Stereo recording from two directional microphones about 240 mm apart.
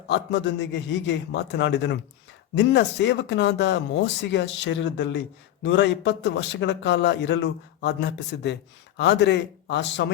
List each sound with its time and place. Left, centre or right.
0.1 s speech: left